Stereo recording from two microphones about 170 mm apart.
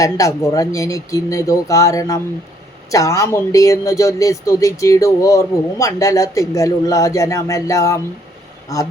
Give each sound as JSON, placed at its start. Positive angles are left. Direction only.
{"t": 0.0, "sound": "speech", "side_deg": 20}